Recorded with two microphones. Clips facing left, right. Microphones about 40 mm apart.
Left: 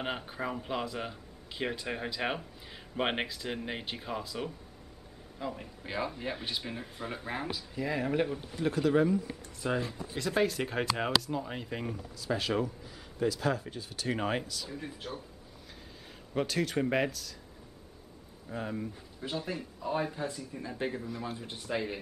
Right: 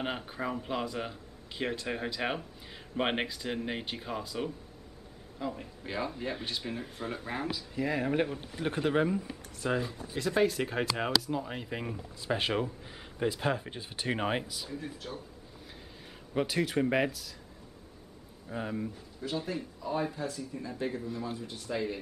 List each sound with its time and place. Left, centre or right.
0.0 s a man's voice: centre
7.7 s speech: centre
8.4 s speech: right
9.6 s a man's voice: centre
12.2 s speech: right
14.7 s speech: centre
16.3 s speech: centre
18.5 s a man's voice: centre
19.8 s speech: centre